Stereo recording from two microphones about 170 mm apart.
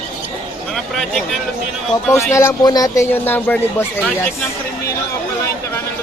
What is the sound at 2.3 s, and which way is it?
A man's voice, 15° left (ahead or behind).